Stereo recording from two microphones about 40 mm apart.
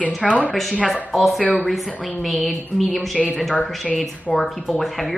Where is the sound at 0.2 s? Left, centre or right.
Centre.